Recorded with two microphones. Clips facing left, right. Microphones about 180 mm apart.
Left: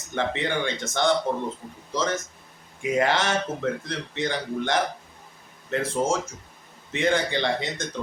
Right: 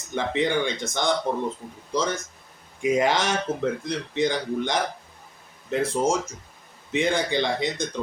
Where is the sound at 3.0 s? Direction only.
15° right (ahead or behind).